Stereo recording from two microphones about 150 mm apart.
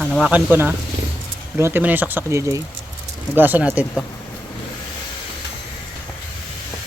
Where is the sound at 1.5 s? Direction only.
15° right (ahead or behind).